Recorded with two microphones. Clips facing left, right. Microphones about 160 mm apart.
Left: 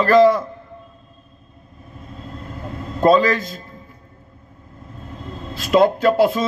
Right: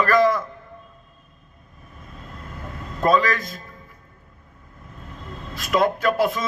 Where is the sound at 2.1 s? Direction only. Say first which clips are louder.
Left 5 dB; 30° left (ahead or behind).